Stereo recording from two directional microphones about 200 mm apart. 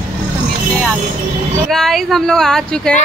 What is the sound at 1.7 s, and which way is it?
Speech, centre (ahead or behind).